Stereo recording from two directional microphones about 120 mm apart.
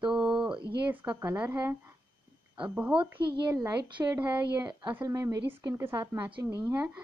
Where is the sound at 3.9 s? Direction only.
35° right (ahead or behind).